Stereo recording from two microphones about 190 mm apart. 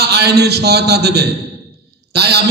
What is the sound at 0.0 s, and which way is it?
A man's voice, 60° right (ahead or behind).